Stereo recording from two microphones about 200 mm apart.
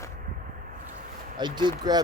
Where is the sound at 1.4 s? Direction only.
20° right (ahead or behind).